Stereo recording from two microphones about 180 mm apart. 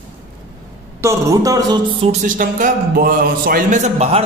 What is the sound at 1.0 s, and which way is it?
Speech, 15° right (ahead or behind).